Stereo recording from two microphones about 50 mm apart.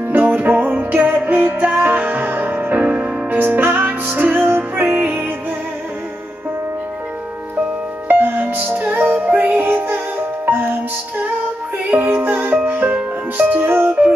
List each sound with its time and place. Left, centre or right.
0.1 s music: right
8.1 s music: right
9.5 s music: right
12.1 s music: right